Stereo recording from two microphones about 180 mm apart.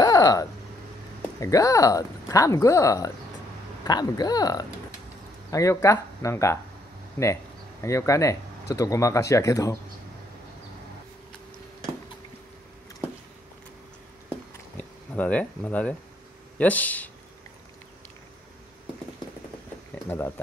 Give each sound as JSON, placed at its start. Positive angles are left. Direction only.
{"t": 0.0, "sound": "a sound", "side_deg": 20}
{"t": 1.4, "sound": "speech", "side_deg": 20}
{"t": 7.8, "sound": "speech", "side_deg": 15}
{"t": 14.8, "sound": "speech", "side_deg": 10}
{"t": 20.1, "sound": "speech", "side_deg": 15}